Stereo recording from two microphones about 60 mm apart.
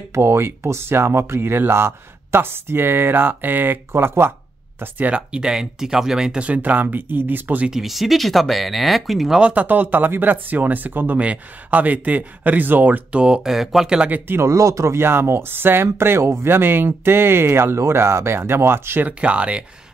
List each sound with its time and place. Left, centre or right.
0.1 s speech: right
4.7 s speech: right
5.1 s speech: centre; by 7.6 s right
7.7 s speech: centre
9.4 s speech: right
13.1 s speech: centre
14.0 s speech: right
14.5 s speech: right
15.0 s speech: right
19.0 s speech: centre